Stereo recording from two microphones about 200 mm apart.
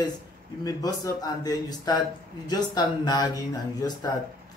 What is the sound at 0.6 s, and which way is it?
A man's voice, 20° left (ahead or behind).